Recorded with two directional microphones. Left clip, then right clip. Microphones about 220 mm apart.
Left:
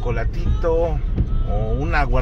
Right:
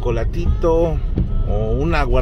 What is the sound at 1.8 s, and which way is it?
Speech, 30° right (ahead or behind).